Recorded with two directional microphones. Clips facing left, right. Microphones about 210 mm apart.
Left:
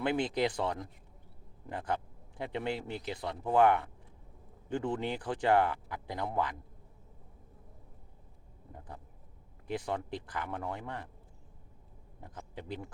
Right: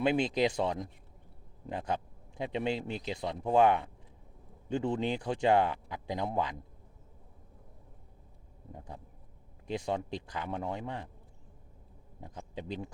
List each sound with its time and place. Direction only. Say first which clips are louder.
0.0 s speech: right 3 dB; 15° right (ahead or behind)
2.4 s speech: right 3 dB; 15° right (ahead or behind)
9.8 s speech: right 2 dB; 15° right (ahead or behind)
12.2 s speech: right 3 dB; 15° right (ahead or behind)